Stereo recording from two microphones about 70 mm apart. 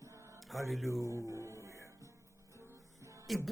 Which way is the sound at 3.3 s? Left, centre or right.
Centre.